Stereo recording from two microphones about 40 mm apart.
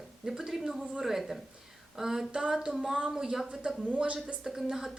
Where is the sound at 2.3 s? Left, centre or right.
Centre.